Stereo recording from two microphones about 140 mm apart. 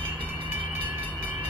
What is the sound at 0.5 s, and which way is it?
Train, 15° right (ahead or behind).